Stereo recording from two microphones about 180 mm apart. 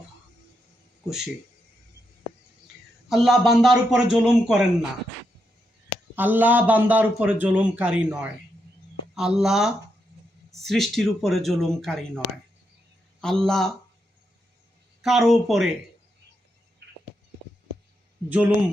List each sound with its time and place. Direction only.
3.1 s a man's voice: centre (ahead or behind)
6.1 s a man's voice: 10° right (ahead or behind)
13.2 s a man's voice: 5° left (ahead or behind)
15.0 s a man's voice: centre (ahead or behind)
16.8 s a sound: 70° right (ahead or behind)
18.3 s speech: 10° right (ahead or behind)